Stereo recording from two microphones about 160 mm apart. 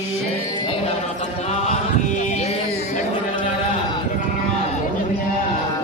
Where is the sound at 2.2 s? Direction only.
50° left (ahead or behind).